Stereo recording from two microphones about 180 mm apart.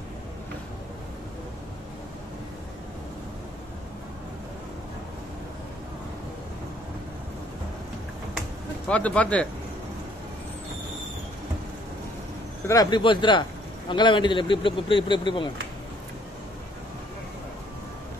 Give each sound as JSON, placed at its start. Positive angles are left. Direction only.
{"t": 8.8, "sound": "speech", "side_deg": 5}
{"t": 12.6, "sound": "a man's voice", "side_deg": 20}